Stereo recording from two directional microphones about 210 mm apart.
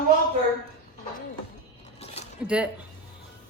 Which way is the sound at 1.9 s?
30° left (ahead or behind).